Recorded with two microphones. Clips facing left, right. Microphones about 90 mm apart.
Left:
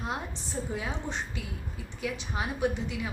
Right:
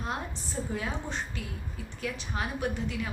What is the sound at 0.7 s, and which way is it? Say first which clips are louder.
A woman's voice: right 1 dB; 15° left (ahead or behind).